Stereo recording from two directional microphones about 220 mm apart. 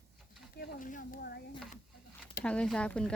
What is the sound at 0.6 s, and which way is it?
Speech, 35° left (ahead or behind).